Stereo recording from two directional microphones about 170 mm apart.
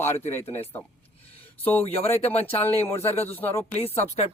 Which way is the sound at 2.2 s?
35° left (ahead or behind).